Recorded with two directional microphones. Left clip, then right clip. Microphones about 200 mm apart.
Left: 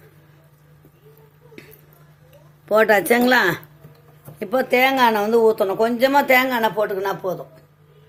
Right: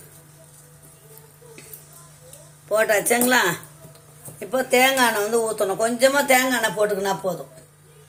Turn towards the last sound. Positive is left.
turn(degrees=35)  # may be behind; listen again after turning